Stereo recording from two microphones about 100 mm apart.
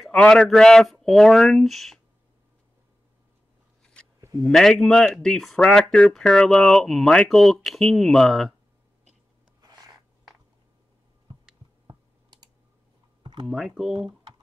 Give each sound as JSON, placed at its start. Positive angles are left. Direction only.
{"t": 0.0, "sound": "speech", "side_deg": 5}
{"t": 4.2, "sound": "a sound", "side_deg": -35}
{"t": 4.5, "sound": "speech", "side_deg": 5}
{"t": 11.9, "sound": "typing", "side_deg": -45}
{"t": 13.2, "sound": "a sound", "side_deg": -50}
{"t": 13.5, "sound": "speech", "side_deg": 0}